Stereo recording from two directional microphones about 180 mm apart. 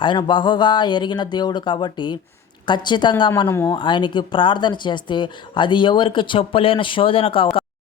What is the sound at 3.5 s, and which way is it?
Speech, 15° left (ahead or behind).